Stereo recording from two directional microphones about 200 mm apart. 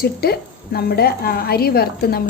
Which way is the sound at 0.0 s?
50° left (ahead or behind).